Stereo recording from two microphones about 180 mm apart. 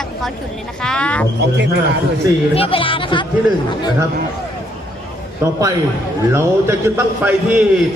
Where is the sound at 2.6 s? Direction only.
30° left (ahead or behind).